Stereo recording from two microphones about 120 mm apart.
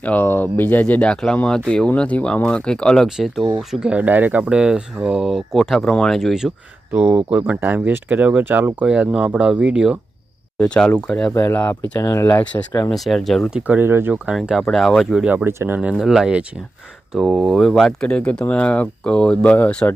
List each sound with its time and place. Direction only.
0.0 s speech: 15° left (ahead or behind); by 6.5 s 5° right (ahead or behind)
6.9 s speech: 15° right (ahead or behind)
10.6 s speech: 5° left (ahead or behind)
12.9 s speech: centre (ahead or behind)
13.7 s speech: 15° right (ahead or behind); by 15.2 s centre (ahead or behind)
15.2 s speech: 10° right (ahead or behind)
16.0 s speech: 5° right (ahead or behind); by 19.9 s 10° left (ahead or behind)